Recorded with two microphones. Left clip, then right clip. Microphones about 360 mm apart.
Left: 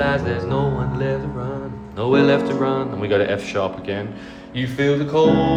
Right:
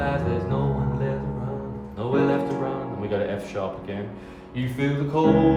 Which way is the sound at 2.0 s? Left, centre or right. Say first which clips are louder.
Left 7 dB; left.